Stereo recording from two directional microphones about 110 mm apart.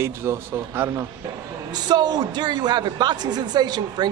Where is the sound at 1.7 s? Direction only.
40° right (ahead or behind).